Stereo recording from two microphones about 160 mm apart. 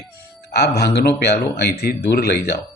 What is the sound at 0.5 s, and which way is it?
A man's voice, 90° left.